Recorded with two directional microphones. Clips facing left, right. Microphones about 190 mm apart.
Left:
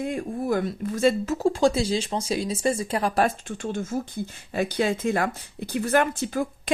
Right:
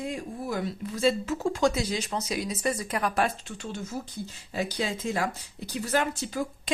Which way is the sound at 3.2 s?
50° left (ahead or behind).